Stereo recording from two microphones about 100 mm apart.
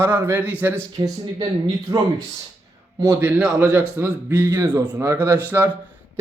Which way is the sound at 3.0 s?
25° right (ahead or behind).